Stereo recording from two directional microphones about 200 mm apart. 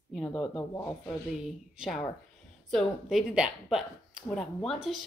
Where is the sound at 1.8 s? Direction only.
Centre (ahead or behind).